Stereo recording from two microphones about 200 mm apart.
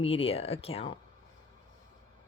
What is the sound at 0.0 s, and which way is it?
Speech, 30° left (ahead or behind).